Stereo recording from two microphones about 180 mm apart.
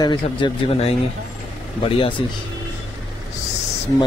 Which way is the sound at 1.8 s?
30° left (ahead or behind).